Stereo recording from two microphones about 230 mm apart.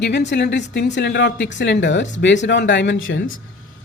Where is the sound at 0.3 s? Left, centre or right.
Left.